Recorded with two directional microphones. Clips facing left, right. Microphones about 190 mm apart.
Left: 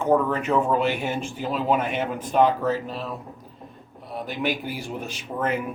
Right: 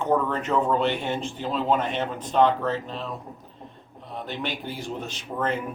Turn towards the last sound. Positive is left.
turn(degrees=10)  # may be behind; listen again after turning